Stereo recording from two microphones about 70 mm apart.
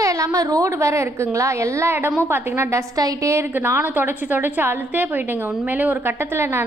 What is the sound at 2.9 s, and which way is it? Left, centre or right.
Speech, right.